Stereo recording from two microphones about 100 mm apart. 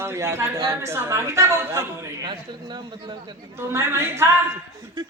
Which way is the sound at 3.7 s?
25° right (ahead or behind).